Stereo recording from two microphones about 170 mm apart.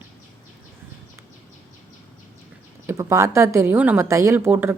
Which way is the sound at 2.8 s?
15° right (ahead or behind).